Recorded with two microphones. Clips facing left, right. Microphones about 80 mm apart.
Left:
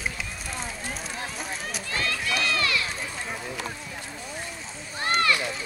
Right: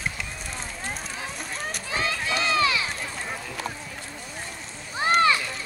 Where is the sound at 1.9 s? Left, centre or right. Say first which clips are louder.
Right 1 dB; right.